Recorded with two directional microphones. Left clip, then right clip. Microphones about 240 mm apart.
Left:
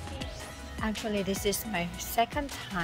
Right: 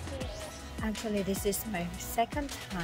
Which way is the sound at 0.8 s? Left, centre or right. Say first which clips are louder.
Left 2 dB; centre.